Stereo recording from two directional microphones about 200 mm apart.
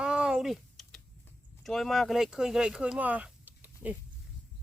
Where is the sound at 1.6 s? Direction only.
Centre (ahead or behind).